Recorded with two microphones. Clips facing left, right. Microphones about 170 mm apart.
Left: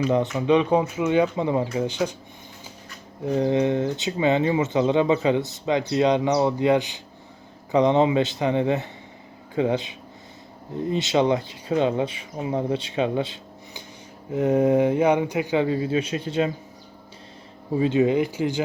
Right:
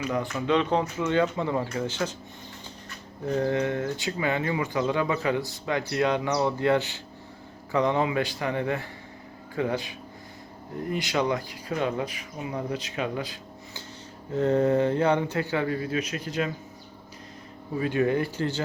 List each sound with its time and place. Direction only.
0.1 s speech: 20° left (ahead or behind)
3.2 s speech: 15° left (ahead or behind)
10.9 s speech: 25° left (ahead or behind)
14.3 s speech: 10° left (ahead or behind); by 16.5 s 30° left (ahead or behind)
17.7 s speech: 20° left (ahead or behind)